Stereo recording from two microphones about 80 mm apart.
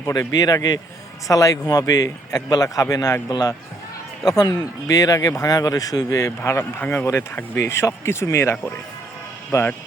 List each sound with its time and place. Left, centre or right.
0.2 s speech: left